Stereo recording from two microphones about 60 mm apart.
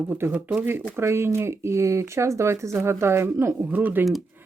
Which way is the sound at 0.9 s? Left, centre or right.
Right.